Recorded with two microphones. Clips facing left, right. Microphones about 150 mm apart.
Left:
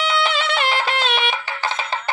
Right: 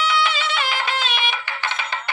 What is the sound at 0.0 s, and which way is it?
Music, 60° left (ahead or behind).